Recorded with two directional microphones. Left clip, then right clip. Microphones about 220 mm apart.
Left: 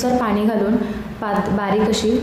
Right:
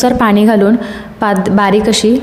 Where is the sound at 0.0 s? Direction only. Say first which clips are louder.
Right 8 dB; 40° right (ahead or behind).